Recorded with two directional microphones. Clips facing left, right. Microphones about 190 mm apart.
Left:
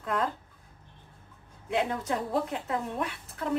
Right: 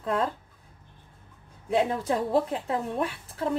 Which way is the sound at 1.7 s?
30° right (ahead or behind).